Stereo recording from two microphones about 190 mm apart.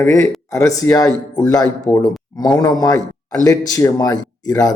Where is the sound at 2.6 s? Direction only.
20° left (ahead or behind).